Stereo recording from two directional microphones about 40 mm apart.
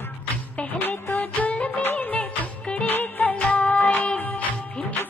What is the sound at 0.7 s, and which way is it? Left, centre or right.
Music, left.